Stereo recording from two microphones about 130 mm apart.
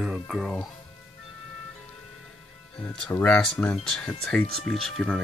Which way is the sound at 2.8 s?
10° left (ahead or behind).